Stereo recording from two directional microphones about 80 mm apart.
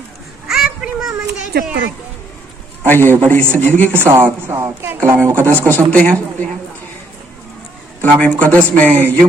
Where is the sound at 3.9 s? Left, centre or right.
Right.